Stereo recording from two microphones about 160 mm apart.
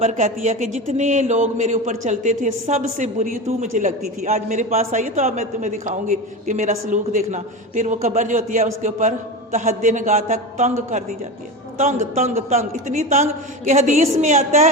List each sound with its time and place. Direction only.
0.0 s a man's voice: 50° right (ahead or behind)
11.8 s a man's voice: 50° right (ahead or behind)